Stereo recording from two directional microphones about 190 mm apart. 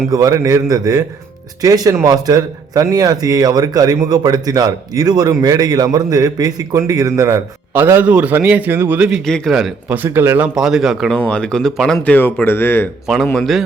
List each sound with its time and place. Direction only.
0.1 s a man's voice: 15° right (ahead or behind); by 13.6 s centre (ahead or behind)